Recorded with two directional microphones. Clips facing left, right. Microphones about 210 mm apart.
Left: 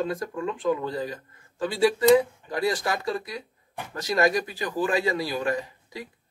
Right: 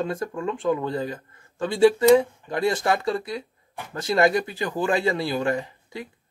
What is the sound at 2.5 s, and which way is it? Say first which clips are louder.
Speech: right 3 dB; 25° right (ahead or behind).